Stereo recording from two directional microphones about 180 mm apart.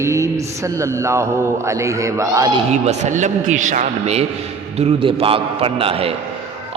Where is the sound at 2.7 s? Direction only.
40° right (ahead or behind).